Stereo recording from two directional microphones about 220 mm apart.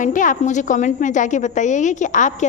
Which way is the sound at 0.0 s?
35° left (ahead or behind).